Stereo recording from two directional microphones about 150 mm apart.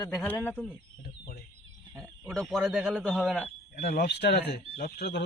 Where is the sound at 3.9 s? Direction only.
90° left.